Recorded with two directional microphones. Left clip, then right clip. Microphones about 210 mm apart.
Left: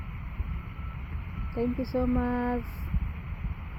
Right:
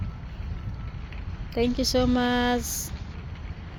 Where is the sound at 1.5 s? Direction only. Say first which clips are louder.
Right 6 dB; 40° right (ahead or behind).